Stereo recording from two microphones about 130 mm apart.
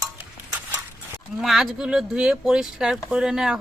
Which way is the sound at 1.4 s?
Centre (ahead or behind).